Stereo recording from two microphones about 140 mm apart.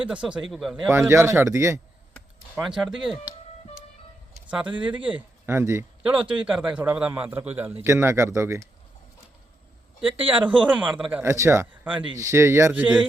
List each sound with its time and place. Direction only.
0.1 s a man's voice: 5° right (ahead or behind)
0.9 s a man's voice: 20° right (ahead or behind)
2.6 s a man's voice: 5° right (ahead or behind)
4.6 s speech: 35° right (ahead or behind)
4.9 s a man's voice: 10° right (ahead or behind)
6.1 s a man's voice: 5° right (ahead or behind)
10.2 s a man's voice: 10° right (ahead or behind)